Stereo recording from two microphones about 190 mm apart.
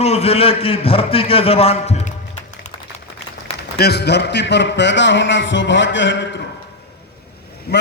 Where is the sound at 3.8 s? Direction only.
60° left (ahead or behind).